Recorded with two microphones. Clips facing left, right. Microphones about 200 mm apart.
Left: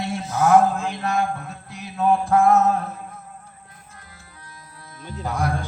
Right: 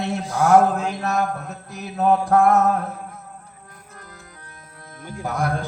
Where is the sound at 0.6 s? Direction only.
40° right (ahead or behind).